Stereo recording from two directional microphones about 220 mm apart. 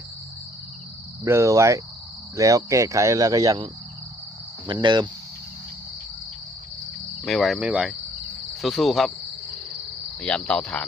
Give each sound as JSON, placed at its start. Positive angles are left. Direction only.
{"t": 1.2, "sound": "speech", "side_deg": -15}
{"t": 7.3, "sound": "insect", "side_deg": 0}
{"t": 10.2, "sound": "insect", "side_deg": 5}